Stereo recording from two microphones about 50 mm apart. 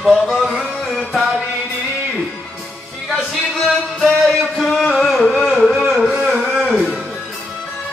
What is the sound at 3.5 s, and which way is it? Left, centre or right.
Music, centre.